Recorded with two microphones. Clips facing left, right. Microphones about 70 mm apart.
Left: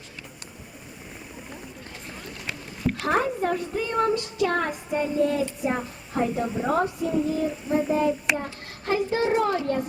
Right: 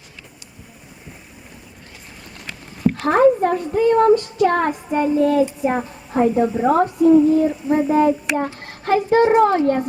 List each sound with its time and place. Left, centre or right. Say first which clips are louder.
3.0 s a child's voice: right 10 dB; right
5.6 s a woman's voice: right 6 dB; right